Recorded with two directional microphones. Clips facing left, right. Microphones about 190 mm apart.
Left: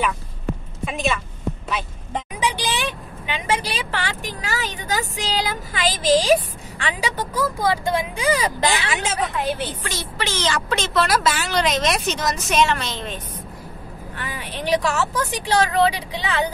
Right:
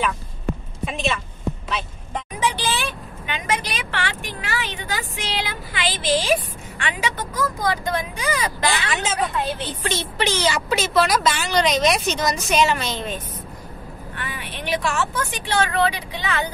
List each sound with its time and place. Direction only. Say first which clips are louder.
0.8 s speech: left 1 dB; centre (ahead or behind)
2.4 s vehicle: right 1 dB; 15° left (ahead or behind)
3.3 s a woman's voice: left 2 dB; 30° left (ahead or behind)
8.9 s a woman's voice: even; 10° left (ahead or behind)
9.8 s speech: right 4 dB; 25° right (ahead or behind); by 13.2 s 5° right (ahead or behind)
14.1 s a woman's voice: left 2 dB; 40° left (ahead or behind)